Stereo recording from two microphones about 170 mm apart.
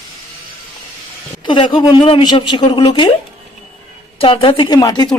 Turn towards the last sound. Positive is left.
turn(degrees=25)  # may be behind; listen again after turning